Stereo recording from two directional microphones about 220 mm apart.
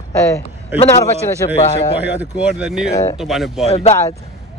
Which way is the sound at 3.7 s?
30° left (ahead or behind).